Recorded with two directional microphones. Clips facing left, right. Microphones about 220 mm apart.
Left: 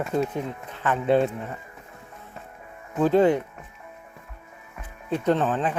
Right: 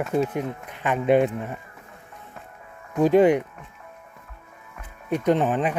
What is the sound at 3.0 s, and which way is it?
Speech, 15° right (ahead or behind).